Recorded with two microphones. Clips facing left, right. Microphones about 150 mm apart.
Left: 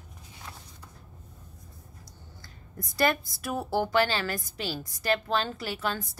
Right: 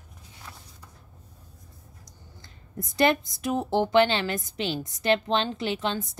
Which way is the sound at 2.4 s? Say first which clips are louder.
Right 5 dB; 20° right (ahead or behind).